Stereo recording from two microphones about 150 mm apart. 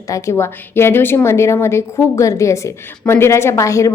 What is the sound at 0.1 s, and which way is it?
A woman's voice, 20° left (ahead or behind).